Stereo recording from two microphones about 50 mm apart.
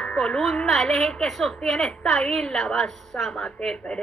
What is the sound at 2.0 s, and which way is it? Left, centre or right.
Speech, left.